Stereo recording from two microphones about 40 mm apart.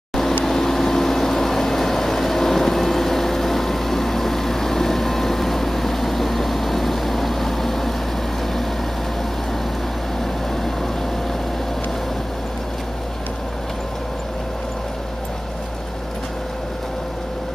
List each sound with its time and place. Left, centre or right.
0.5 s vehicle: centre
10.5 s vehicle: centre